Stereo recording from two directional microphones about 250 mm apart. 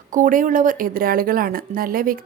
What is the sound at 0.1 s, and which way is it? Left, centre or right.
Speech, right.